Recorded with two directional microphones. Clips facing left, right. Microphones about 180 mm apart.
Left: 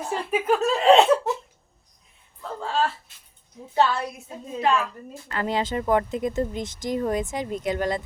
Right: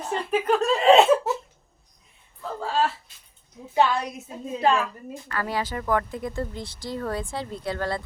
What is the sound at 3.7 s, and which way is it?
Speech, 15° right (ahead or behind).